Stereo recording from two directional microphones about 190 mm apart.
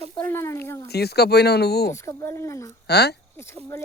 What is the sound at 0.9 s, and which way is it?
Speech, 60° left (ahead or behind).